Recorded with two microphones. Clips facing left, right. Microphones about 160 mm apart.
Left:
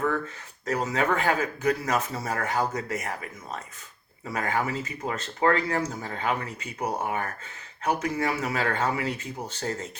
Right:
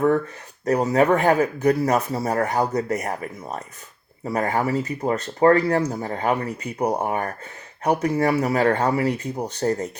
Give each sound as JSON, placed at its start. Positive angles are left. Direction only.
{"t": 0.9, "sound": "speech", "side_deg": -35}